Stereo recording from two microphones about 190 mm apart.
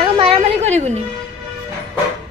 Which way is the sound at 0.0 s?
30° right (ahead or behind).